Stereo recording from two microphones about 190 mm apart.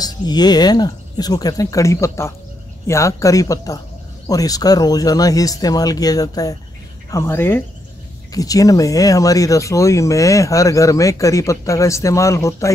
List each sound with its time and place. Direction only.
0.0 s speech: 20° left (ahead or behind)